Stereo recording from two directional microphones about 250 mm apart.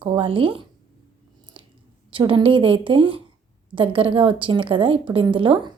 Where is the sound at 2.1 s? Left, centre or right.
Centre.